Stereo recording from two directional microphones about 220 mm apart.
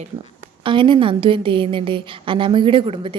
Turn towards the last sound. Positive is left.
turn(degrees=-25)  # may be behind; listen again after turning